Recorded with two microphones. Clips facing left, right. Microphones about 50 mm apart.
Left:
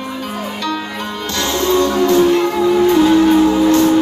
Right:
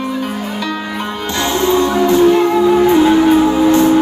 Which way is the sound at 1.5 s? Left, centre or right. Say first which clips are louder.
Right 1 dB; right.